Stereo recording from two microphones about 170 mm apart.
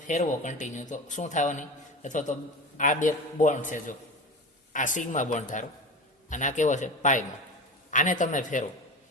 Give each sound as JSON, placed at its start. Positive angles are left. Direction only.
{"t": 0.1, "sound": "a man's voice", "side_deg": 45}